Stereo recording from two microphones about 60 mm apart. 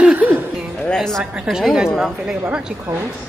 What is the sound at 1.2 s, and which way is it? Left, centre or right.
A woman's voice, centre.